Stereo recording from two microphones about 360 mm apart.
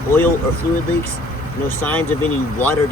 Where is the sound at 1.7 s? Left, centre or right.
Centre.